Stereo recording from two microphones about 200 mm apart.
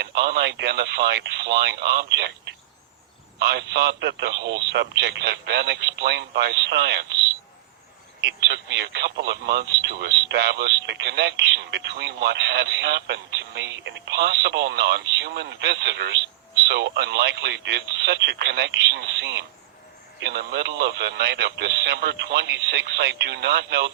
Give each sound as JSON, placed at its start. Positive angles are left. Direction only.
{"t": 0.0, "sound": "speech", "side_deg": -55}